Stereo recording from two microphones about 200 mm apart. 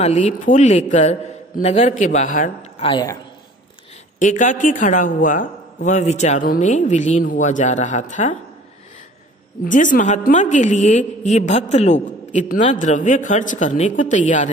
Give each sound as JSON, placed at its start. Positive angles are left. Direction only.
{"t": 0.0, "sound": "a man's voice", "side_deg": 35}
{"t": 2.8, "sound": "speech", "side_deg": 20}
{"t": 4.2, "sound": "a man's voice", "side_deg": 40}
{"t": 9.7, "sound": "a man's voice", "side_deg": 40}